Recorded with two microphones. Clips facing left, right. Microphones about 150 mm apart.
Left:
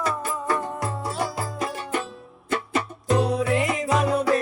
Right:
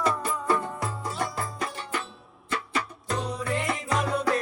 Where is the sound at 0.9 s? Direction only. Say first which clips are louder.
Left 4 dB; 65° left (ahead or behind).